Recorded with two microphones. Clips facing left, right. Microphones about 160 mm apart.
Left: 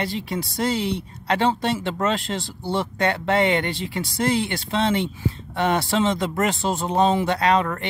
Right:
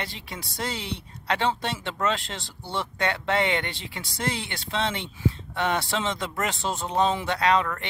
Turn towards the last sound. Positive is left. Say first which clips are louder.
# left 3 dB
turn(degrees=40)  # may be behind; listen again after turning